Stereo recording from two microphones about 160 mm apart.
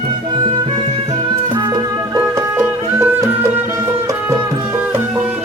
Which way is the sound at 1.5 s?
25° right (ahead or behind).